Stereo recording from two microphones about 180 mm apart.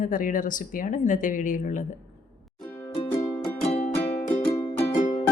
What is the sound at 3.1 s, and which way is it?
Music, 15° left (ahead or behind).